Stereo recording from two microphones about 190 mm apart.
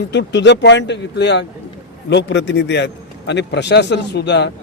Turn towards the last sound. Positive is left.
turn(degrees=65)  # may be behind; listen again after turning